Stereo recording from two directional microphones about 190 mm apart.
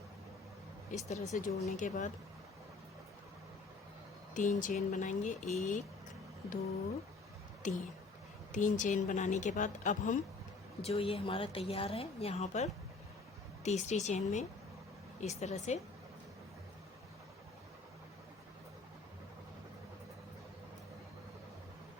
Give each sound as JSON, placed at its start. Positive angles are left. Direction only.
{"t": 0.9, "sound": "a woman's voice", "side_deg": 40}
{"t": 4.4, "sound": "a woman's voice", "side_deg": 40}
{"t": 7.6, "sound": "a woman's voice", "side_deg": 40}
{"t": 10.8, "sound": "a woman's voice", "side_deg": 30}